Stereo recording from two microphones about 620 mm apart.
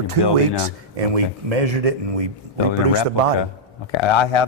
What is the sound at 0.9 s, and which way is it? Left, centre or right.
Speech, right.